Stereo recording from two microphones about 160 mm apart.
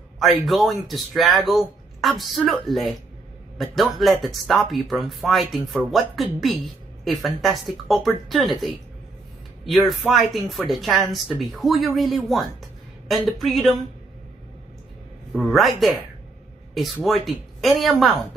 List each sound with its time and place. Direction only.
0.2 s speech: centre (ahead or behind)
15.3 s speech: centre (ahead or behind)